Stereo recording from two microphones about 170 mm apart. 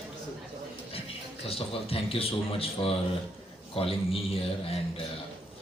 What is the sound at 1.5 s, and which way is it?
Speech, 35° left (ahead or behind).